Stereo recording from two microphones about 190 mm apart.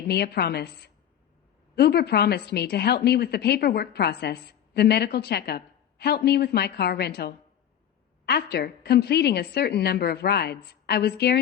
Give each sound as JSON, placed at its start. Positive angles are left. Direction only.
{"t": 0.1, "sound": "a woman's voice", "side_deg": 60}